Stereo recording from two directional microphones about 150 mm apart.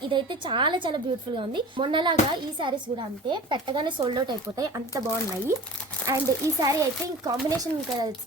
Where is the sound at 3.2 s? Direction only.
30° right (ahead or behind).